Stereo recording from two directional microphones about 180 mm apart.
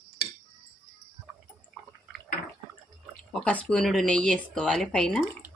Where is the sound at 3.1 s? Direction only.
5° left (ahead or behind).